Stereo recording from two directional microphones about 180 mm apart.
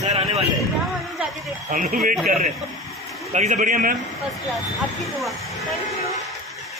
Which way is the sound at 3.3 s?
45° right (ahead or behind).